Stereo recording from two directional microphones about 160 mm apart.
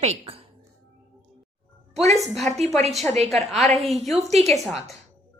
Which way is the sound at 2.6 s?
45° right (ahead or behind).